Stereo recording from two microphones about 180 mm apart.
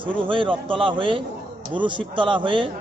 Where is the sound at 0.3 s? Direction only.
30° right (ahead or behind).